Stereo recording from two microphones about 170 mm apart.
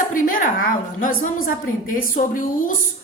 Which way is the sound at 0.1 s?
55° left (ahead or behind).